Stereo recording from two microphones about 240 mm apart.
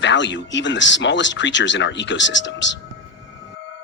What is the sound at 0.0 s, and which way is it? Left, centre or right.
Speech, left.